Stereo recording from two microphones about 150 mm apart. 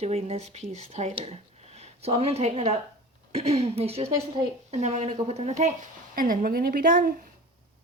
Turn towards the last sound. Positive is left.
turn(degrees=-70)  # may be behind; listen again after turning